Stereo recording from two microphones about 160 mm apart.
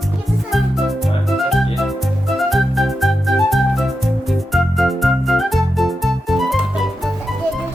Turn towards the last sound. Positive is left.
turn(degrees=0)  # may be behind; listen again after turning